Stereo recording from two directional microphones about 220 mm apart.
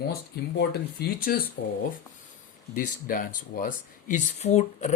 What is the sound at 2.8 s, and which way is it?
Speech, 40° left (ahead or behind).